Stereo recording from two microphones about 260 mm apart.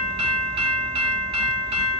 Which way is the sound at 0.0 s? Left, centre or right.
Right.